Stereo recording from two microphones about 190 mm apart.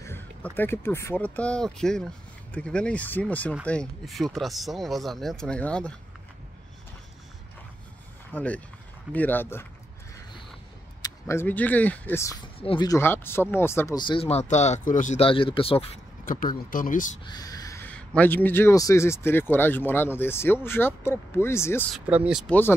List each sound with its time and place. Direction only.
0.0 s speech: 10° left (ahead or behind)
8.3 s speech: 10° left (ahead or behind)
11.0 s speech: 15° left (ahead or behind)
12.5 s speech: 25° left (ahead or behind)
16.3 s speech: 45° left (ahead or behind)
17.2 s speech: 20° left (ahead or behind)
21.9 s speech: 5° right (ahead or behind)
22.5 s speech: 10° left (ahead or behind)